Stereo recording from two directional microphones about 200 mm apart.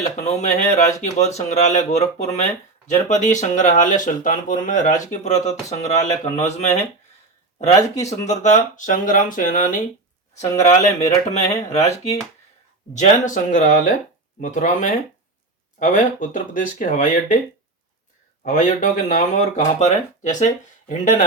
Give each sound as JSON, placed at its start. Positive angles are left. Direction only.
{"t": 0.2, "sound": "speech", "side_deg": 35}
{"t": 8.0, "sound": "speech", "side_deg": 35}
{"t": 18.4, "sound": "speech", "side_deg": 40}